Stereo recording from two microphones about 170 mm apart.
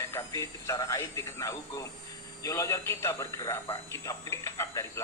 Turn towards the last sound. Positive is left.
turn(degrees=15)  # may be behind; listen again after turning